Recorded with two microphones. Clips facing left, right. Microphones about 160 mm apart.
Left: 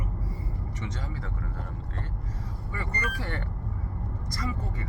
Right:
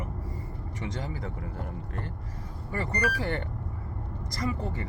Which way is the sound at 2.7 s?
40° right (ahead or behind).